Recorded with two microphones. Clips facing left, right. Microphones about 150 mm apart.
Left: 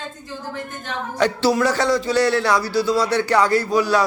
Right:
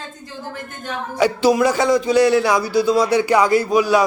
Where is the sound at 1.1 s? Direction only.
10° right (ahead or behind).